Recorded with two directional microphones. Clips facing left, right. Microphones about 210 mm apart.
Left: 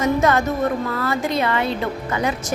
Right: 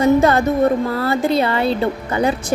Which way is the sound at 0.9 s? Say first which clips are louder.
Right 5 dB; 30° right (ahead or behind).